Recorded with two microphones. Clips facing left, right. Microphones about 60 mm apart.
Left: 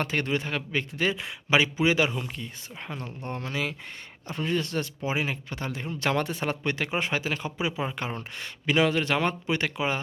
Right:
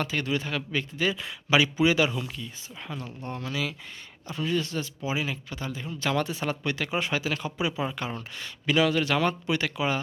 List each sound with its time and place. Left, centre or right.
0.0 s speech: left